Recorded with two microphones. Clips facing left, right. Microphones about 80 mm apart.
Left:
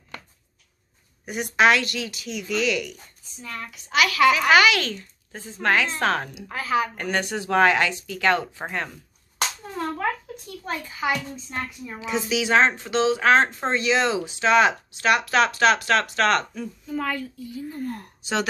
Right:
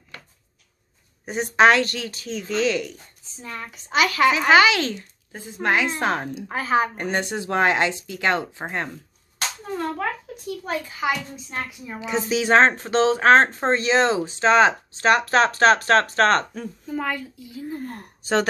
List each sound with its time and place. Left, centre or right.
1.2 s a woman's voice: right
6.3 s a woman's voice: right
10.6 s a child's voice: centre
12.1 s speech: right
16.9 s a child's voice: centre
17.6 s speech: right